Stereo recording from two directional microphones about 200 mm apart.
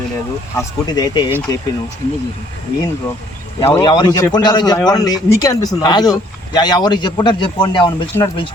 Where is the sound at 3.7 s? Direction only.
20° left (ahead or behind).